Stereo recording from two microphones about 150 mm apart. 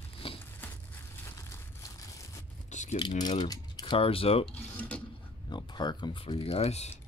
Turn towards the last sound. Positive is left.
turn(degrees=45)  # may be behind; listen again after turning